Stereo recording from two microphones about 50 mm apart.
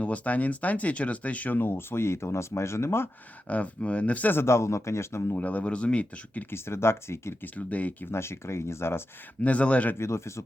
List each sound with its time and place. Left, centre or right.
0.0 s speech: left
1.5 s speech: left
3.4 s speech: left
4.4 s speech: left
5.4 s speech: left
6.5 s speech: left
7.4 s speech: left
8.0 s speech: left
9.4 s speech: left
9.9 s speech: left